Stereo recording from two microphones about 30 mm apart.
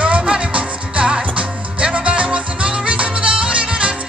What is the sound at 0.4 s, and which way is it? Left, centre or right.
Music, right.